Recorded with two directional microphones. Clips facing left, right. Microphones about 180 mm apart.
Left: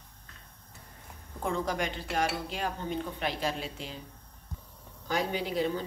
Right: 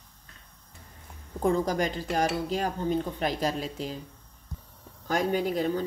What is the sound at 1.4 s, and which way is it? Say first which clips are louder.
A woman's voice: right 6 dB; 40° right (ahead or behind).